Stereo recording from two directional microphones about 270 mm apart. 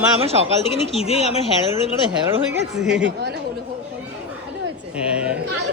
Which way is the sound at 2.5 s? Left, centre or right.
Centre.